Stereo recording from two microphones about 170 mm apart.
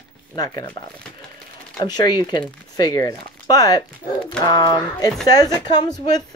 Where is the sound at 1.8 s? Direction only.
25° left (ahead or behind).